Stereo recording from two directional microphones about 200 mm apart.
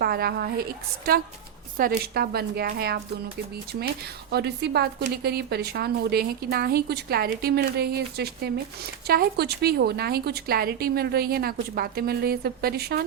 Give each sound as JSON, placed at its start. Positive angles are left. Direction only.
{"t": 0.0, "sound": "a woman's voice", "side_deg": -50}
{"t": 4.3, "sound": "a woman's voice", "side_deg": -55}